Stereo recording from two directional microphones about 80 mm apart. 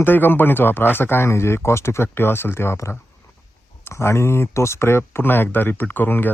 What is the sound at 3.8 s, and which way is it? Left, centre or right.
Speech, left.